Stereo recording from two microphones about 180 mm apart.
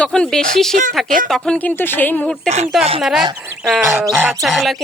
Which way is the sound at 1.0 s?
50° right (ahead or behind).